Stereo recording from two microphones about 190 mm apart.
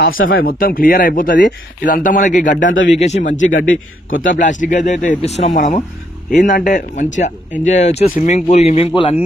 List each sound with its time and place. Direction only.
0.4 s speech: 50° left (ahead or behind)
4.1 s speech: 90° left
4.4 s speech: 40° left (ahead or behind)